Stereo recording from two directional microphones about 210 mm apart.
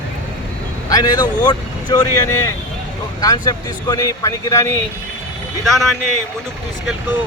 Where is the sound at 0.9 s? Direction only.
15° left (ahead or behind).